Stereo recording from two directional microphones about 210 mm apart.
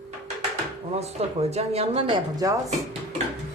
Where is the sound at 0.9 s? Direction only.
30° right (ahead or behind).